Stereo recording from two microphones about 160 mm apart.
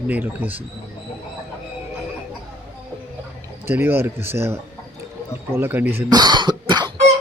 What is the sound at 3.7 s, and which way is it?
Speech, 15° right (ahead or behind).